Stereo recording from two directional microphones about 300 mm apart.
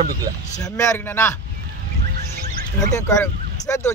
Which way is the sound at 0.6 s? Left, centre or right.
Centre.